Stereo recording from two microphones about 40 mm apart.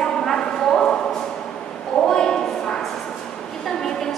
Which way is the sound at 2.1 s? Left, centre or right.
Centre.